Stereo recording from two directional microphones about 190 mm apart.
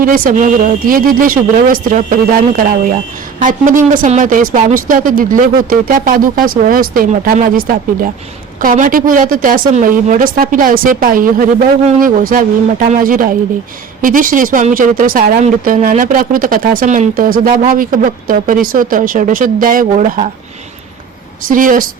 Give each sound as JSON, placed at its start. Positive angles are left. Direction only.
{"t": 0.0, "sound": "speech", "side_deg": -45}
{"t": 21.4, "sound": "speech", "side_deg": -45}